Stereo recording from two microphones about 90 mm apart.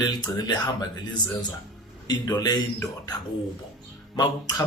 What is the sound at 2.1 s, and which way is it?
Speech, 45° left (ahead or behind).